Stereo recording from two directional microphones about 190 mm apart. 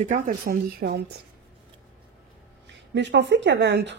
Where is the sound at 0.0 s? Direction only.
45° right (ahead or behind).